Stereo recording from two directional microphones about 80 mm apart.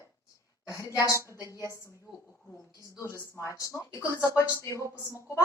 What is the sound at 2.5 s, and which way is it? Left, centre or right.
A woman's voice, left.